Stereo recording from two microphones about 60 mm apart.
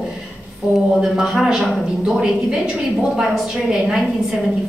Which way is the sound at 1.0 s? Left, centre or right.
Centre.